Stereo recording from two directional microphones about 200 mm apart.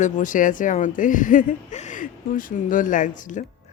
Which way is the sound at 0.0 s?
40° left (ahead or behind).